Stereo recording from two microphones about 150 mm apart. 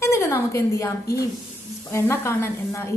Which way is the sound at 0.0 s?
20° left (ahead or behind).